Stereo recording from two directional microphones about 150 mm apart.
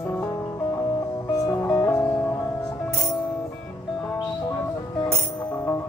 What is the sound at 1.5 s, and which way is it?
Music, 15° left (ahead or behind).